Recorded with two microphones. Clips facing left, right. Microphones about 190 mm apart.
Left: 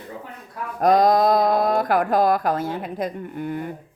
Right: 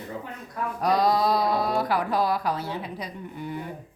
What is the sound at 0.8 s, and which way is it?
Speech, 50° left (ahead or behind).